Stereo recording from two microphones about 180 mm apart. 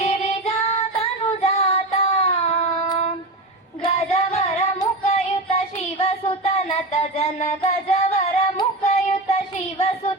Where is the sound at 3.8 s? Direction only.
30° left (ahead or behind).